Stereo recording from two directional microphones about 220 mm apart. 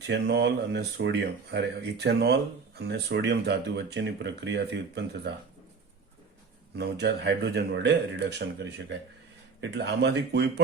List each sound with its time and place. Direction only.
0.0 s speech: 50° right (ahead or behind)
6.7 s speech: 50° right (ahead or behind)
9.6 s speech: 50° right (ahead or behind)